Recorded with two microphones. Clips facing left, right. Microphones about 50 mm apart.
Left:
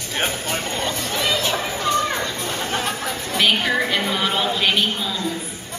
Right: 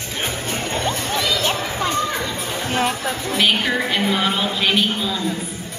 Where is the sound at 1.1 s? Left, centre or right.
Left.